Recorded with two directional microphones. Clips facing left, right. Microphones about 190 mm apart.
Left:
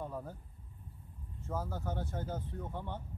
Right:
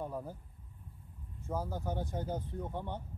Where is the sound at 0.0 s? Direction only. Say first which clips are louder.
Right 2 dB; 15° right (ahead or behind).